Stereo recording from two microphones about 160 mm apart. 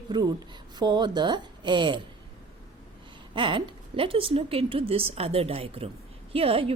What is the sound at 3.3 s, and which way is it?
A woman's voice, 30° right (ahead or behind).